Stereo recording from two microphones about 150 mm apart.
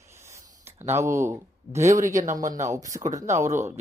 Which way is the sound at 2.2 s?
55° right (ahead or behind).